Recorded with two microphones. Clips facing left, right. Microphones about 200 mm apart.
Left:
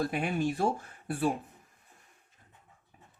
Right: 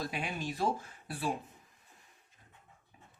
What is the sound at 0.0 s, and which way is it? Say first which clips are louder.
Speech: left 8 dB; 50° left (ahead or behind).